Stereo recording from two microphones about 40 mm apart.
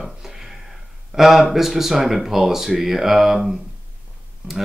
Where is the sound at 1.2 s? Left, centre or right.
Centre.